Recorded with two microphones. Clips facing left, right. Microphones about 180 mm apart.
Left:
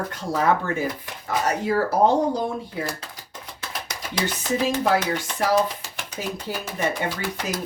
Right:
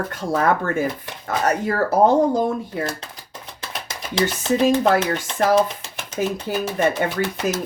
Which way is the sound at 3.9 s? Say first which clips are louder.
Right 6 dB; 25° right (ahead or behind).